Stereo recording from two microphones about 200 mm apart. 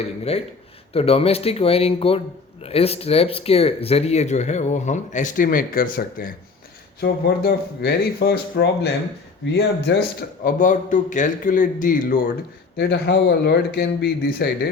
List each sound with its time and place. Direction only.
0.0 s a man's voice: 30° left (ahead or behind)
12.7 s speech: 55° left (ahead or behind)